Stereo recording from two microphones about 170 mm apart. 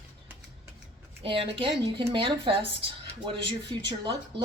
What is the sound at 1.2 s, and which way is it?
A woman's voice, 30° right (ahead or behind).